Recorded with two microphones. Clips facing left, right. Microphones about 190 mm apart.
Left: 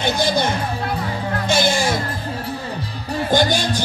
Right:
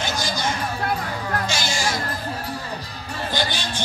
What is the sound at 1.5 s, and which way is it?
Music, 55° left (ahead or behind).